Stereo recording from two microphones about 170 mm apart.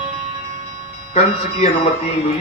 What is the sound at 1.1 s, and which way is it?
Speech, 35° left (ahead or behind).